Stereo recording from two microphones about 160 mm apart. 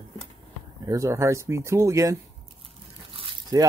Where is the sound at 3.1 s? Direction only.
35° right (ahead or behind).